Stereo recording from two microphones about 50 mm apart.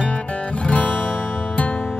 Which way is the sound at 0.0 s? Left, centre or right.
Left.